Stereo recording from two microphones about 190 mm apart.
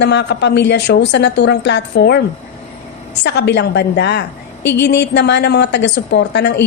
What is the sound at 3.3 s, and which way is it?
A woman's voice, 65° left (ahead or behind).